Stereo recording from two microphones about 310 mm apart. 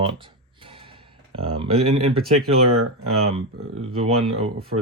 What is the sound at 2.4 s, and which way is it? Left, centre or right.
Speech, right.